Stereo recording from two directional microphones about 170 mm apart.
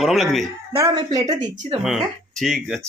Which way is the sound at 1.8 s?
5° right (ahead or behind).